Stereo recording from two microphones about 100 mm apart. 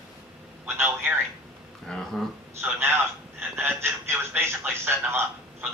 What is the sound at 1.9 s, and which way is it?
Speech, 5° left (ahead or behind).